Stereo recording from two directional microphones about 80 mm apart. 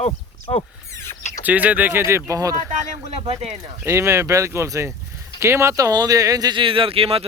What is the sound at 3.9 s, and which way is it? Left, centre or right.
Speech, right.